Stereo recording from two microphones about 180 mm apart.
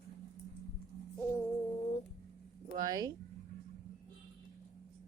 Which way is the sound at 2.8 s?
20° right (ahead or behind).